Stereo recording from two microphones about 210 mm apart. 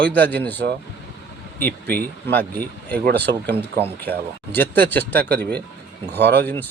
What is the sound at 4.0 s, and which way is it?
Speech, 10° left (ahead or behind).